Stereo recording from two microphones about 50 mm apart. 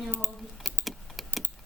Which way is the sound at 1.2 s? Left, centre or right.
Centre.